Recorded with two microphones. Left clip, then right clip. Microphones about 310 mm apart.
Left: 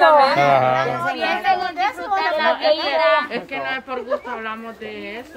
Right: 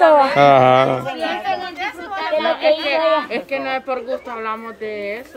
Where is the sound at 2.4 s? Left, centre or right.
Right.